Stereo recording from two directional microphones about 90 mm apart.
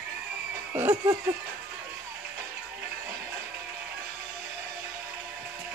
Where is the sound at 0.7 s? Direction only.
25° right (ahead or behind).